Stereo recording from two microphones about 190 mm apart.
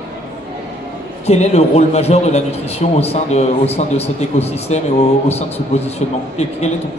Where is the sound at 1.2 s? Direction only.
35° left (ahead or behind).